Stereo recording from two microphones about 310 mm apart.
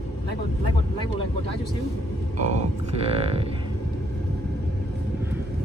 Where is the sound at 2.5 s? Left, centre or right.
Centre.